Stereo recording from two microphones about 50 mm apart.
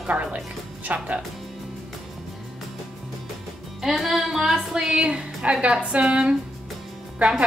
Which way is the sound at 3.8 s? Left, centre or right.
Centre.